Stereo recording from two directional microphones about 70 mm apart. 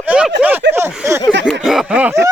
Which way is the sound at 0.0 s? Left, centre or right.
Right.